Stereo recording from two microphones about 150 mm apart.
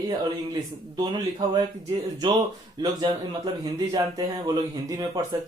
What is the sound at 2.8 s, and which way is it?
Speech, 25° right (ahead or behind).